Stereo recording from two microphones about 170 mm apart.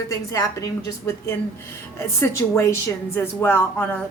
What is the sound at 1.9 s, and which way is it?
A woman's voice, 15° left (ahead or behind).